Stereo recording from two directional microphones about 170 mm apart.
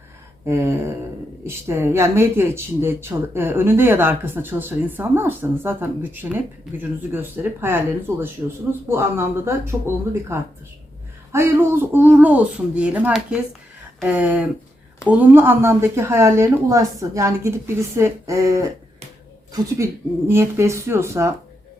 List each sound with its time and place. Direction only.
0.4 s speech: 15° right (ahead or behind)